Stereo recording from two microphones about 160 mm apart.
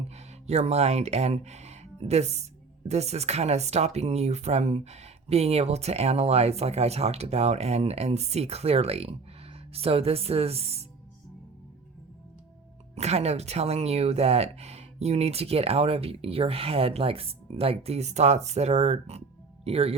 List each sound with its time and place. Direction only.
0.1 s speech: 45° right (ahead or behind)
13.0 s speech: 40° right (ahead or behind)